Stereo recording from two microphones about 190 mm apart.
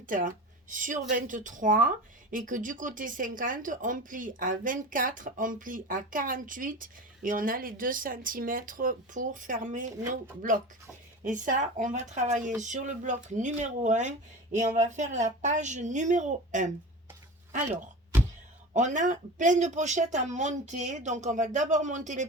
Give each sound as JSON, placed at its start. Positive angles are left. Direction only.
{"t": 0.1, "sound": "speech", "side_deg": -45}
{"t": 11.2, "sound": "speech", "side_deg": -45}
{"t": 18.7, "sound": "speech", "side_deg": -40}